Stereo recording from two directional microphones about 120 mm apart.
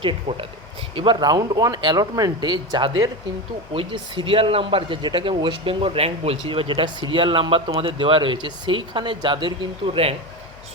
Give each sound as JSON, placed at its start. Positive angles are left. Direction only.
{"t": 0.0, "sound": "speech", "side_deg": -45}